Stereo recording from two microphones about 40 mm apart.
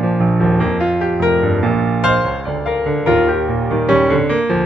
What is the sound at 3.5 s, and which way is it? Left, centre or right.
Music, centre.